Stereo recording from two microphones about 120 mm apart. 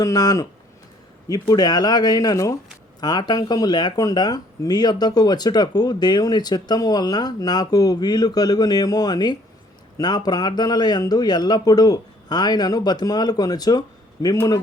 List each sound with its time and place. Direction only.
0.0 s speech: 30° left (ahead or behind)